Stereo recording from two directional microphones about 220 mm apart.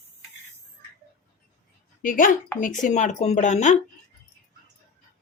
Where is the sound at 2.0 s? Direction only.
40° left (ahead or behind).